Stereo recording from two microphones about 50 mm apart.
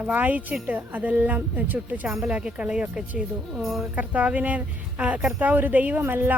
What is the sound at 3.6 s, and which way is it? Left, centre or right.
Speech, centre.